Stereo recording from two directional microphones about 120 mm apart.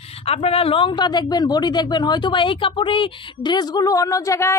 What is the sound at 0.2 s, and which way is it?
Speech, 55° left (ahead or behind).